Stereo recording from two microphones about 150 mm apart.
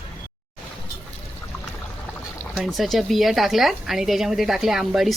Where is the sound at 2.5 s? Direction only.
Centre (ahead or behind).